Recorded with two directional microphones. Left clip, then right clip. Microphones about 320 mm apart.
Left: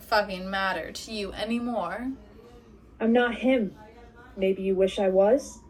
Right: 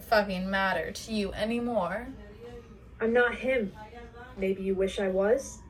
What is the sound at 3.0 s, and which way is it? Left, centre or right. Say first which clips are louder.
Speech: left 1 dB; left.